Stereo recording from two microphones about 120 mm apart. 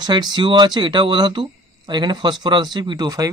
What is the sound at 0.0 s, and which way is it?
Speech, 40° right (ahead or behind).